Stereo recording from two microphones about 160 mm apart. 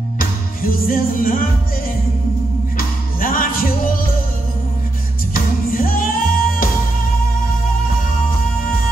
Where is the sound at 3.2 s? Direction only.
60° left (ahead or behind).